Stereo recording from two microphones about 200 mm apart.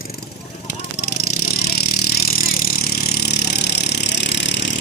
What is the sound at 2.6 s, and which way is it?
Vehicle, 55° left (ahead or behind).